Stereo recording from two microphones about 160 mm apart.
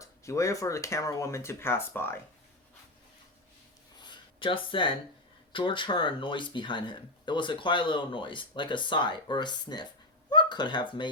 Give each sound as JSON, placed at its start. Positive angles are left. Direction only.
{"t": 0.0, "sound": "speech", "side_deg": 20}
{"t": 4.0, "sound": "a sound", "side_deg": 30}
{"t": 5.5, "sound": "speech", "side_deg": 30}